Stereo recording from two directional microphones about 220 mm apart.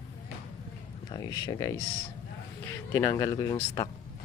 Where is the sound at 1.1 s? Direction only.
15° left (ahead or behind).